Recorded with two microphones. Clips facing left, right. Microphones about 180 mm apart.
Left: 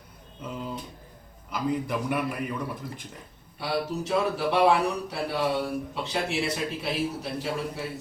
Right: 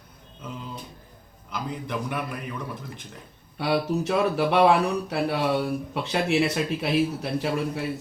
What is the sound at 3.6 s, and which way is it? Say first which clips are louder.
Speech: right 5 dB; 65° right (ahead or behind).